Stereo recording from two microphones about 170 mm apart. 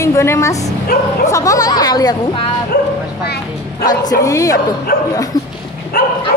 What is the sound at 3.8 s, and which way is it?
Speech, 20° left (ahead or behind).